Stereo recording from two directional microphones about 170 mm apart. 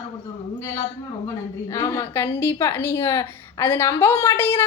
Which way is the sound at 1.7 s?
15° left (ahead or behind).